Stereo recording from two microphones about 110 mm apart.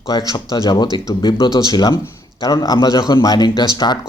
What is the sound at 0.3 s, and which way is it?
Speech, 35° left (ahead or behind).